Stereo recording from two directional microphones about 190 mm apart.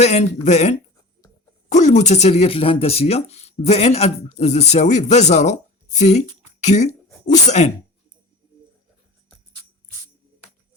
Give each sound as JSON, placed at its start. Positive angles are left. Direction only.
{"t": 0.0, "sound": "speech", "side_deg": 35}